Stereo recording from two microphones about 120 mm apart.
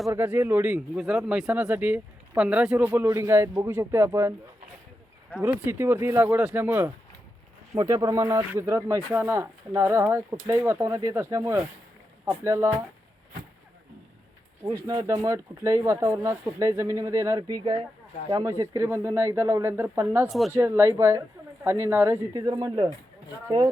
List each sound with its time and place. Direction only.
0.1 s a man's voice: 20° right (ahead or behind)
0.9 s a man's voice: 5° right (ahead or behind); by 4.4 s 20° right (ahead or behind)
5.6 s a man's voice: 20° right (ahead or behind)
14.6 s speech: 30° right (ahead or behind)
20.2 s speech: centre (ahead or behind)
20.6 s speech: 20° right (ahead or behind)